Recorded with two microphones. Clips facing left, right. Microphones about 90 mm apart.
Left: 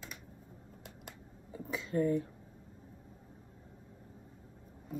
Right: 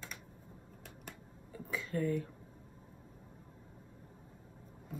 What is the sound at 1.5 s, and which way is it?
Speech, 20° left (ahead or behind).